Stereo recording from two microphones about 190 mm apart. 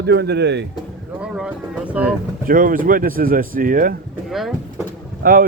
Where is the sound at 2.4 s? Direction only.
45° right (ahead or behind).